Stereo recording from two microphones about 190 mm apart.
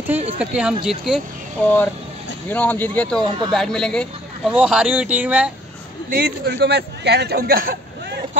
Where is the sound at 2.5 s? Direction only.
10° left (ahead or behind); by 5.5 s 5° right (ahead or behind).